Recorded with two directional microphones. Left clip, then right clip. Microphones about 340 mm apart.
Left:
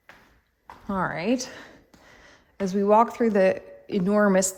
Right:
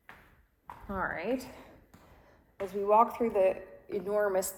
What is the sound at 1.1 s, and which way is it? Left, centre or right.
Speech, left.